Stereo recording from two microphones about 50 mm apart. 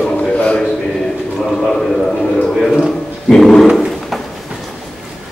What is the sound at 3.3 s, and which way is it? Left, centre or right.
Speech, centre.